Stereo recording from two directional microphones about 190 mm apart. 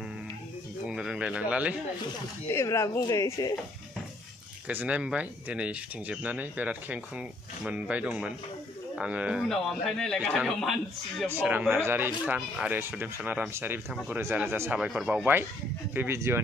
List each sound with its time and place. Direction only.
0.8 s a sound: 5° right (ahead or behind)
2.4 s speech: 15° left (ahead or behind)
4.6 s a man's voice: 5° right (ahead or behind)